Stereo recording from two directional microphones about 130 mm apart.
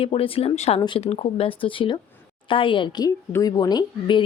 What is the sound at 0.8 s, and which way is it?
Speech, 40° left (ahead or behind).